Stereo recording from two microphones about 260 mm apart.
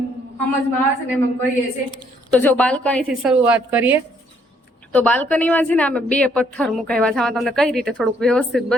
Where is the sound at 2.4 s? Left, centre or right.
Centre.